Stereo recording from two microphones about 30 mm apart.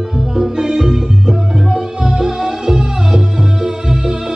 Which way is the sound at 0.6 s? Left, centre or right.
Right.